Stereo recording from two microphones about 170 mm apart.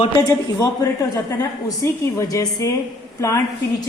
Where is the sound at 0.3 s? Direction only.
20° left (ahead or behind).